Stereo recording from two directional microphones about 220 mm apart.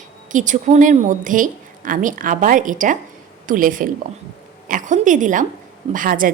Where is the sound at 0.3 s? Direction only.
35° right (ahead or behind).